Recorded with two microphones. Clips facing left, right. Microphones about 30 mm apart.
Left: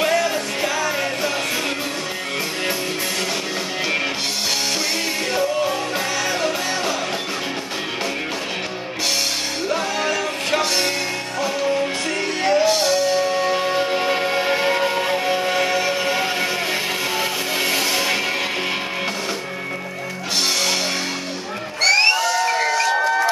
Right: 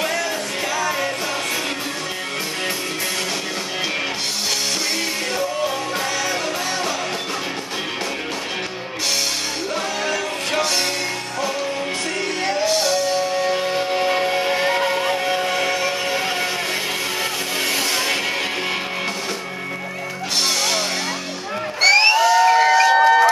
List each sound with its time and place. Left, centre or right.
0.0 s music: centre
5.3 s music: centre
9.7 s music: centre
12.4 s music: centre
21.8 s a sound: centre
22.9 s a sound: right